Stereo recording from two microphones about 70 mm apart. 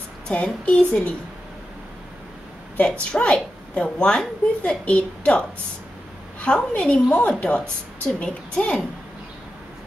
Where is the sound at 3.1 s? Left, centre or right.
Centre.